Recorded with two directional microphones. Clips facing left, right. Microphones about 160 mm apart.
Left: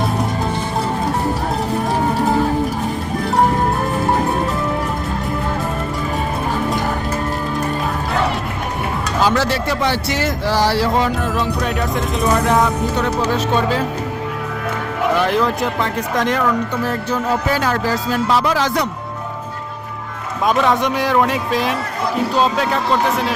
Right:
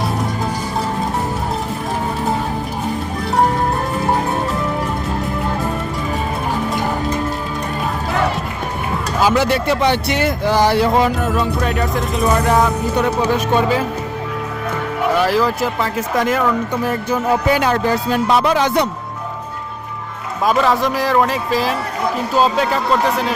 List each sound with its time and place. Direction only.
9.2 s speech: 10° right (ahead or behind)
11.3 s speech: centre (ahead or behind)
15.1 s speech: centre (ahead or behind); by 18.9 s 25° right (ahead or behind)
20.4 s speech: centre (ahead or behind)